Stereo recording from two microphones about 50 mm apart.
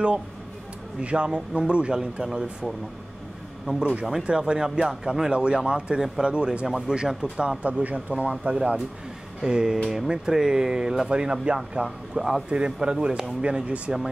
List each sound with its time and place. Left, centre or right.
1.0 s speech: right
3.7 s speech: right
5.3 s speech: centre
12.2 s a man's voice: centre
12.4 s speech: centre